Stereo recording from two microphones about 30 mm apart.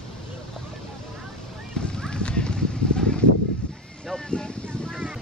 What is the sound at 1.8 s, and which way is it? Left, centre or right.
Clip-clop, left.